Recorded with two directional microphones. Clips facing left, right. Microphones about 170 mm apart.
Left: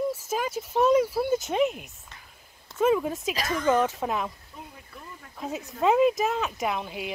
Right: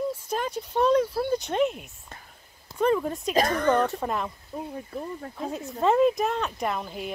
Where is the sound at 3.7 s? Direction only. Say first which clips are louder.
Even; 5° left (ahead or behind).